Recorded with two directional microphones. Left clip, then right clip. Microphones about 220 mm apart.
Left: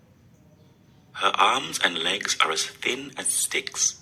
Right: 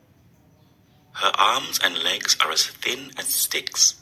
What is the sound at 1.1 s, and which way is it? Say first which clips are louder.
Speech: right 1 dB; 15° right (ahead or behind).